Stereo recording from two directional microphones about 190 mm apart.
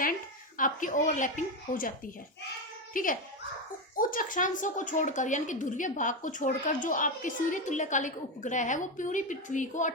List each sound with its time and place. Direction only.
0.5 s a woman's voice: 45° left (ahead or behind)
2.9 s a child's voice: 45° left (ahead or behind)